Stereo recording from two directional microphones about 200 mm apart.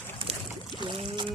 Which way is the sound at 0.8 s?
25° right (ahead or behind).